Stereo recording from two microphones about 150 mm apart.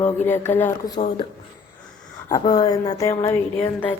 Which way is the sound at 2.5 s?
25° left (ahead or behind).